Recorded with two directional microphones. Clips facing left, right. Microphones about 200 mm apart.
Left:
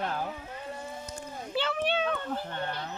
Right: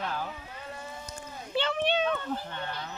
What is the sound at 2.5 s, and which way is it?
Speech, 40° left (ahead or behind).